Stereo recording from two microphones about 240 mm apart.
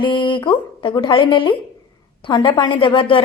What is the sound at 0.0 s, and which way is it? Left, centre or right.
A woman's voice, centre.